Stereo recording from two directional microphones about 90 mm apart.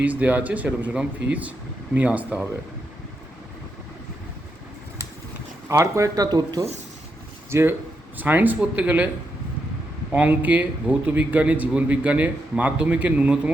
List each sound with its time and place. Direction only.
0.0 s a man's voice: 15° right (ahead or behind)
5.6 s speech: 35° right (ahead or behind)
7.5 s speech: 25° right (ahead or behind)
10.1 s a man's voice: 20° right (ahead or behind)